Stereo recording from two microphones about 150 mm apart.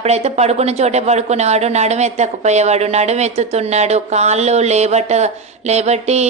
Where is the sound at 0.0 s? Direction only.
45° right (ahead or behind).